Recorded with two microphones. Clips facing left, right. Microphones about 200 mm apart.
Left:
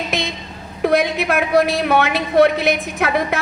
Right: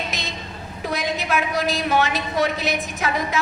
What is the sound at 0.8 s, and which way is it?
A woman's voice, 60° left (ahead or behind).